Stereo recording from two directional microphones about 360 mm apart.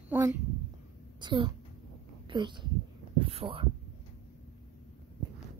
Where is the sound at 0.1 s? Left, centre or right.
Centre.